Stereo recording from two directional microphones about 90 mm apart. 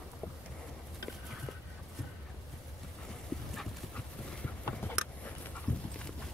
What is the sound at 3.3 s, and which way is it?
Clip-clop, 5° left (ahead or behind).